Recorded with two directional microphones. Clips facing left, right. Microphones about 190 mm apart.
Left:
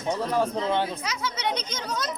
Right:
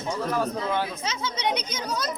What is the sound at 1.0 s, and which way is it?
Speech, 20° right (ahead or behind).